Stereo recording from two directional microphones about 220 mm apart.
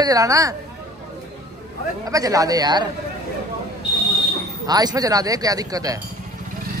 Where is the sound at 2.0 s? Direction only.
15° right (ahead or behind).